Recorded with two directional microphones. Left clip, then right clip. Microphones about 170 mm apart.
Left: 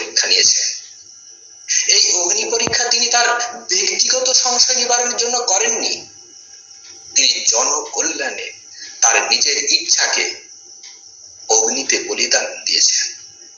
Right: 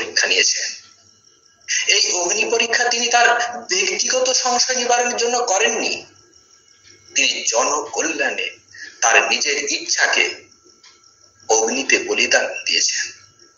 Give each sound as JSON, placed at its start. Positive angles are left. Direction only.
{"t": 0.0, "sound": "a sound", "side_deg": -20}
{"t": 1.7, "sound": "a woman's voice", "side_deg": -20}
{"t": 7.1, "sound": "a man's voice", "side_deg": -20}
{"t": 11.4, "sound": "a man's voice", "side_deg": -20}